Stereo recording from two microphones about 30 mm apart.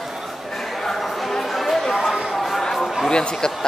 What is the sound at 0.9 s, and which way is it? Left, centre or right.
Chatter, centre.